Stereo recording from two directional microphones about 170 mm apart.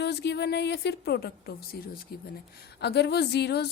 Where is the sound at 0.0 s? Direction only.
75° left (ahead or behind).